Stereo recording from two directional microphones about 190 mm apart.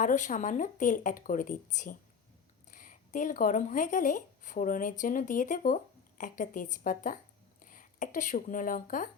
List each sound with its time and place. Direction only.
0.0 s speech: 40° left (ahead or behind)